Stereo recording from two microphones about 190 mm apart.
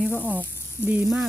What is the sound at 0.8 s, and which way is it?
Speech, 5° right (ahead or behind).